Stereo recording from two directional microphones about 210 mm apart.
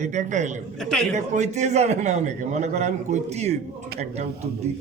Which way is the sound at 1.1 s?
35° right (ahead or behind).